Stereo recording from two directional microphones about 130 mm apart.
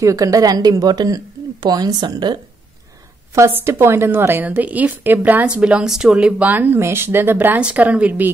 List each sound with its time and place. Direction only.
0.0 s a woman's voice: 25° right (ahead or behind)
3.3 s a woman's voice: 20° right (ahead or behind)